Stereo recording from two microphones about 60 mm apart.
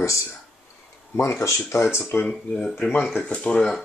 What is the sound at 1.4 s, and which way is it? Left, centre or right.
Speech, left.